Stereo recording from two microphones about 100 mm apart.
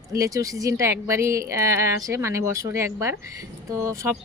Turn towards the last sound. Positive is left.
turn(degrees=-30)  # may be behind; listen again after turning